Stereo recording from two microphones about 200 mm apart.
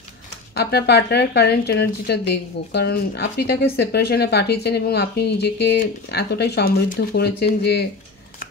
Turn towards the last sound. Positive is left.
turn(degrees=55)  # may be behind; listen again after turning